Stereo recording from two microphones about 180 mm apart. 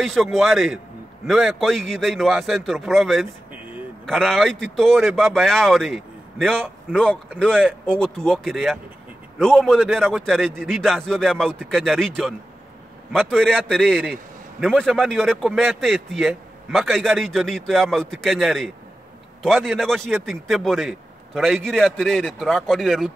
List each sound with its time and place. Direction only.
0.0 s a man's voice: centre (ahead or behind)